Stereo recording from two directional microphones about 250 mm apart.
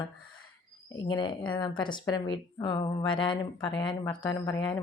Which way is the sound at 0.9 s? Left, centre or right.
Centre.